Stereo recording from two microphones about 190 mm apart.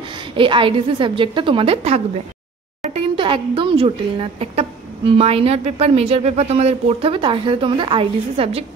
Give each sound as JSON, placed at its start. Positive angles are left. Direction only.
{"t": 0.1, "sound": "a woman's voice", "side_deg": -25}